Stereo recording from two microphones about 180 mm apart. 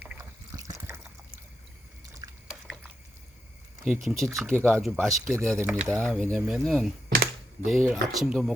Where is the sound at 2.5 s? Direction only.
5° right (ahead or behind).